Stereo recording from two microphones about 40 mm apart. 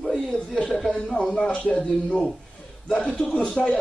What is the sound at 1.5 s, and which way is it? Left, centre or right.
A man's voice, left.